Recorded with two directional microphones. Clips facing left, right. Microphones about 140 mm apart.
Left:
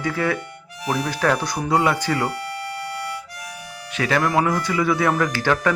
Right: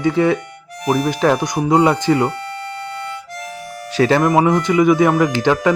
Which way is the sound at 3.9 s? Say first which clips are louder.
Right 7 dB; 30° right (ahead or behind).